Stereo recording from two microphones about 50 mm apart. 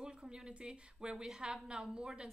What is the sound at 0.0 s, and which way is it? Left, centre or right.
A woman's voice, centre.